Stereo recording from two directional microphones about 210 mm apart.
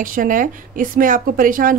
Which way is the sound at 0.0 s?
40° right (ahead or behind).